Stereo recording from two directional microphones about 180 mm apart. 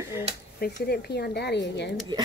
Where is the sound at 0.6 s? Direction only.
65° left (ahead or behind).